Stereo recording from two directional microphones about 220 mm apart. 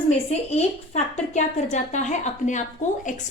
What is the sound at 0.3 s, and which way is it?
A woman's voice, 30° left (ahead or behind).